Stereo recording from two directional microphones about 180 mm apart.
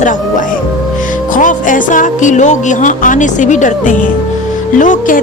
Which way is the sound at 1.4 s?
45° left (ahead or behind).